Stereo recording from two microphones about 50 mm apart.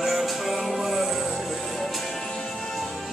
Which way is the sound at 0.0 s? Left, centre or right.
Centre.